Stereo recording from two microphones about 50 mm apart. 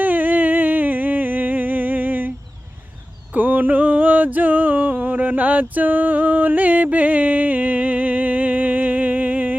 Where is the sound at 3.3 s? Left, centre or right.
Right.